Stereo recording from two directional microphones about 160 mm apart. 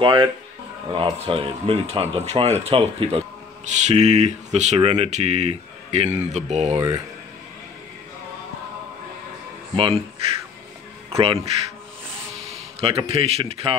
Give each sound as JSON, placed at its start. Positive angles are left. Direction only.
{"t": 0.0, "sound": "speech", "side_deg": -30}
{"t": 9.8, "sound": "speech", "side_deg": -30}
{"t": 11.1, "sound": "speech", "side_deg": -40}